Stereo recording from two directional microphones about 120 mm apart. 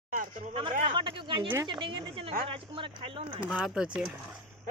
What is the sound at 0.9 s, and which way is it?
Speech, 45° right (ahead or behind).